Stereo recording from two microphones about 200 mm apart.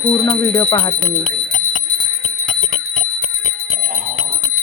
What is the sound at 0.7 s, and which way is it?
Speech, 15° left (ahead or behind).